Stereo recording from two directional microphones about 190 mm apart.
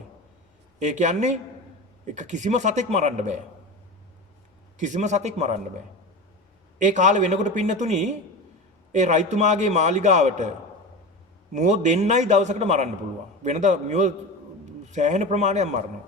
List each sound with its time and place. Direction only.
0.8 s a man's voice: 40° right (ahead or behind)
4.8 s a man's voice: 40° right (ahead or behind)
11.5 s a man's voice: 40° right (ahead or behind)